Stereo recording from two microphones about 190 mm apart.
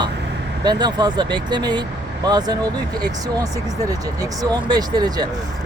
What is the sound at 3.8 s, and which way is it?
Speech, 20° right (ahead or behind).